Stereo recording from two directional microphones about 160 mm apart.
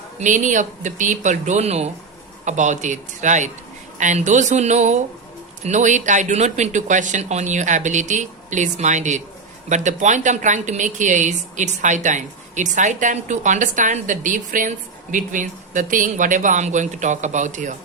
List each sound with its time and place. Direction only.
0.2 s a woman's voice: 50° right (ahead or behind)